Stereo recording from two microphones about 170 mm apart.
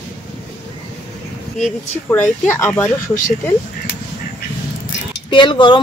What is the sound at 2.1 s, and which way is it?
Speech, 10° left (ahead or behind).